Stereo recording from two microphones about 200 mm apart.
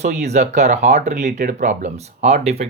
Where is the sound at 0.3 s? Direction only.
35° right (ahead or behind).